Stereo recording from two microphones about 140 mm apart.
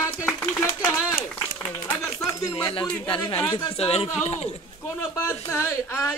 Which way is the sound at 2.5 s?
35° left (ahead or behind).